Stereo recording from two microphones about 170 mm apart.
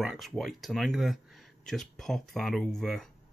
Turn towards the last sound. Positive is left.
turn(degrees=5)  # may be behind; listen again after turning